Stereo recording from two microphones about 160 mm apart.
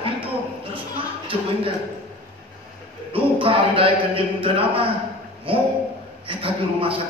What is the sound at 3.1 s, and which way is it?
Speech, 35° right (ahead or behind).